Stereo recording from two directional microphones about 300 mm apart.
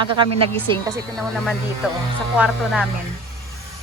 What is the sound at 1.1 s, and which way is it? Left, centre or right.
Speech, centre.